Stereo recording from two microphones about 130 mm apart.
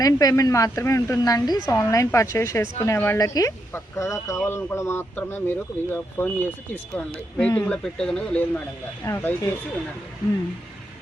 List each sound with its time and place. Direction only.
0.0 s speech: 25° left (ahead or behind); by 8.4 s 5° left (ahead or behind)
9.0 s speech: 20° left (ahead or behind)